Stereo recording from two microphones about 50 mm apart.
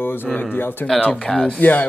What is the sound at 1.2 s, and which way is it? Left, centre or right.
Speech, centre.